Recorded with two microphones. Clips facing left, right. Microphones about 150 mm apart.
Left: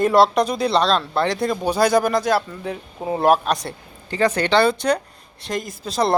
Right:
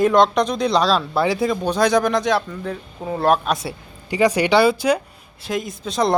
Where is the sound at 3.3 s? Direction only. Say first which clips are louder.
Even; 5° right (ahead or behind).